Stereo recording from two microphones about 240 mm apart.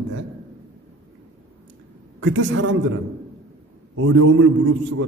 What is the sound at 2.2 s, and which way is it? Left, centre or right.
Speech, right.